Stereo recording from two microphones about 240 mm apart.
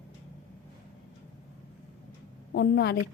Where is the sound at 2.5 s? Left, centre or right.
Left.